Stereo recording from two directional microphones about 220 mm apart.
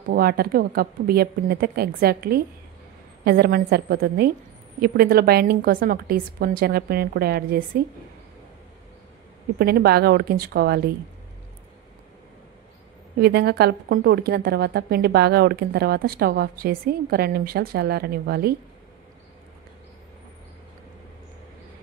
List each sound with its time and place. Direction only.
0.1 s a woman's voice: 45° right (ahead or behind)
9.6 s a woman's voice: 45° right (ahead or behind)
13.2 s a woman's voice: 45° right (ahead or behind)